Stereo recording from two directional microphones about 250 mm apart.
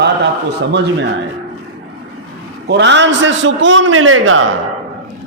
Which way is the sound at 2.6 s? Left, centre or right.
Right.